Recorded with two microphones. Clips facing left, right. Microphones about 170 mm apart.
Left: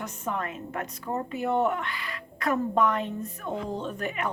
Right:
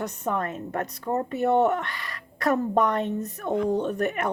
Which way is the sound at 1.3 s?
65° right (ahead or behind).